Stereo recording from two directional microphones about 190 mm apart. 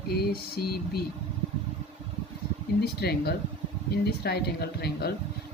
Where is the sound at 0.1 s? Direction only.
55° left (ahead or behind).